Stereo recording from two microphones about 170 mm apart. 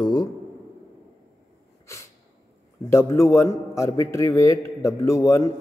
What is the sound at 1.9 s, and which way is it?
Sneeze, 15° left (ahead or behind).